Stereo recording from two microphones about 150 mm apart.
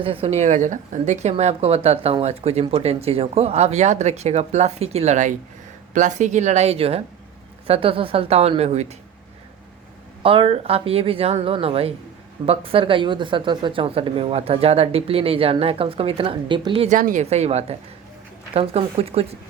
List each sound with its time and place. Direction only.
0.0 s speech: 40° right (ahead or behind)
10.2 s speech: 35° right (ahead or behind)
16.9 s speech: 60° right (ahead or behind)
17.2 s speech: 45° right (ahead or behind)